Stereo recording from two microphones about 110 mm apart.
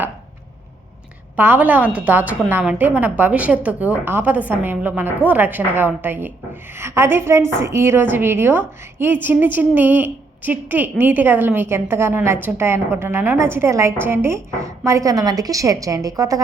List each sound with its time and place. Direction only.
1.4 s a woman's voice: 15° right (ahead or behind); by 16.4 s 30° right (ahead or behind)